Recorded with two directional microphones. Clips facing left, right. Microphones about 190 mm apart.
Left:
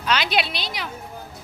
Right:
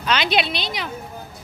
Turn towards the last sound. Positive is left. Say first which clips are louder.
# right 2 dB
turn(degrees=5)  # may be behind; listen again after turning